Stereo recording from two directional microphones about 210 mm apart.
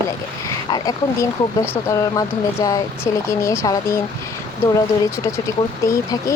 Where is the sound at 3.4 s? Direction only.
15° left (ahead or behind).